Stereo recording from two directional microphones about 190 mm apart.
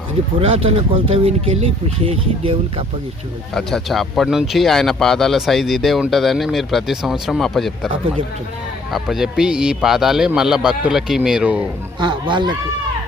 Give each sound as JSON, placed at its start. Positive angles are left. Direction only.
{"t": 0.9, "sound": "speech", "side_deg": -30}
{"t": 3.5, "sound": "speech", "side_deg": 0}
{"t": 11.9, "sound": "speech", "side_deg": -25}